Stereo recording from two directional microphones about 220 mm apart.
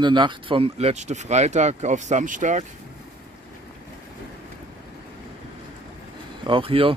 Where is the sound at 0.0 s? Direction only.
20° right (ahead or behind).